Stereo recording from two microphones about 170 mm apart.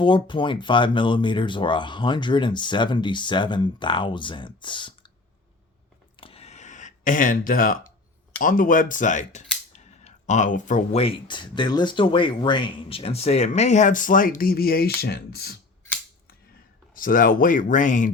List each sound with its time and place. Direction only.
0.0 s speech: 30° left (ahead or behind)
6.1 s a sound: 35° left (ahead or behind); by 7.8 s 55° left (ahead or behind)
8.4 s speech: 55° left (ahead or behind)
9.7 s a sound: 45° left (ahead or behind)
11.0 s speech: 30° left (ahead or behind); by 15.5 s 70° left (ahead or behind)
16.9 s speech: 55° left (ahead or behind)